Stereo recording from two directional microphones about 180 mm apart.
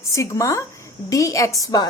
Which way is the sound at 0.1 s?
15° left (ahead or behind).